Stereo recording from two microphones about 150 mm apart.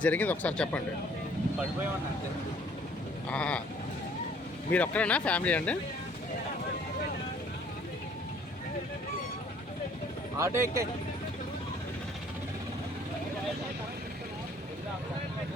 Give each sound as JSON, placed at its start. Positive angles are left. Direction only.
{"t": 0.0, "sound": "speech", "side_deg": 10}
{"t": 3.2, "sound": "speech", "side_deg": 10}
{"t": 4.7, "sound": "speech", "side_deg": 10}
{"t": 10.3, "sound": "speech", "side_deg": -20}